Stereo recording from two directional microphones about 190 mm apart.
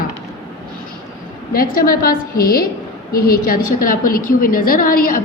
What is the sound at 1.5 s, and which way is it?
A woman's voice, 50° left (ahead or behind).